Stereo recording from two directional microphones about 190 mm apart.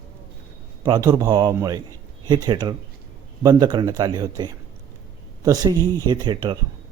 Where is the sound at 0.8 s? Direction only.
20° right (ahead or behind).